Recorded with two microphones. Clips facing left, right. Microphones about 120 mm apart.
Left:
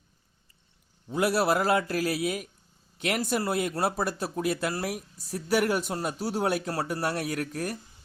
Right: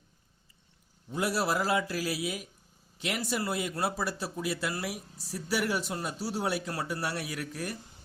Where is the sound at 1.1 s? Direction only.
65° left (ahead or behind); by 7.8 s 45° left (ahead or behind).